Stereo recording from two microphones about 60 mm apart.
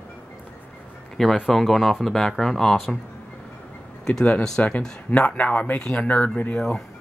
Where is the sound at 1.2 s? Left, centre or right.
Centre.